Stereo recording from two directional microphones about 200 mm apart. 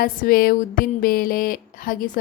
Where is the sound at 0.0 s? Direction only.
45° left (ahead or behind).